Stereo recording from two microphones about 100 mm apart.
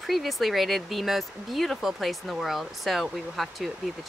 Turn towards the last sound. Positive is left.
turn(degrees=0)  # may be behind; listen again after turning